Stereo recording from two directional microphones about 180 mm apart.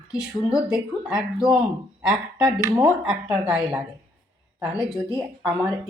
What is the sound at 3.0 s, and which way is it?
Speech, 5° right (ahead or behind).